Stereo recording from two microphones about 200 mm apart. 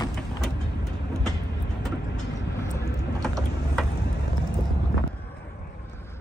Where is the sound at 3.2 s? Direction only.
Centre (ahead or behind).